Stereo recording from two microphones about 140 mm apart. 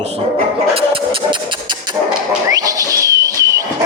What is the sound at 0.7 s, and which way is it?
Music, 40° right (ahead or behind).